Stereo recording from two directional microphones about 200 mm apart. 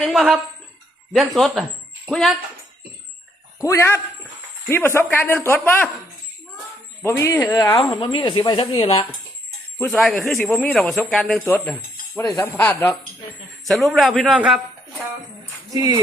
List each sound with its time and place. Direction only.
0.0 s speech: centre (ahead or behind)
3.6 s speech: 15° left (ahead or behind)
7.0 s speech: 15° left (ahead or behind)
9.7 s speech: 5° left (ahead or behind)
15.7 s speech: 20° right (ahead or behind)